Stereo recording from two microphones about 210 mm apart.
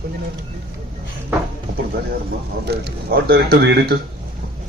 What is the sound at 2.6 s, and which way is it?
A man's voice, 50° right (ahead or behind).